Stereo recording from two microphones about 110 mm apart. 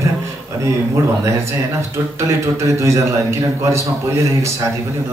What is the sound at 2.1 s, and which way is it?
A man's voice, 25° right (ahead or behind).